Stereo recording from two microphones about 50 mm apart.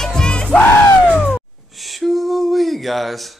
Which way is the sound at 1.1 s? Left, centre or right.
Left.